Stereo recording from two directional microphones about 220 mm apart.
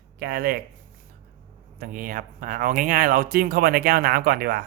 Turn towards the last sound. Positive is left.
turn(degrees=-45)  # may be behind; listen again after turning